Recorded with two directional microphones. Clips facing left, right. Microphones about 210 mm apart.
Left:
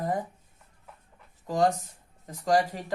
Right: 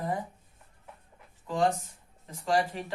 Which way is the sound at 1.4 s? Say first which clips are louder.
Left 2 dB; 40° left (ahead or behind).